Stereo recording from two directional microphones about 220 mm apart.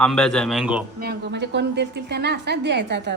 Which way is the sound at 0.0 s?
5° left (ahead or behind).